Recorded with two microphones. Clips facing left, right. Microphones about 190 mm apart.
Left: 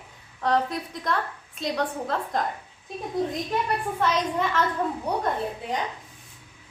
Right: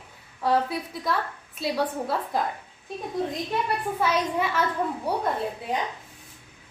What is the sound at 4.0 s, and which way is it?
A woman's voice, 10° right (ahead or behind).